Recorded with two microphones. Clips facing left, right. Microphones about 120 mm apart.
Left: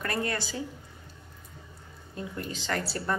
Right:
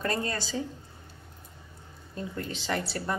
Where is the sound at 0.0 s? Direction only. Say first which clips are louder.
Even; 25° right (ahead or behind).